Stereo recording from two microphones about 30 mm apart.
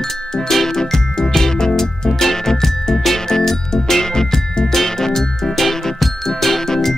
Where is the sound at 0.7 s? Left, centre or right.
Centre.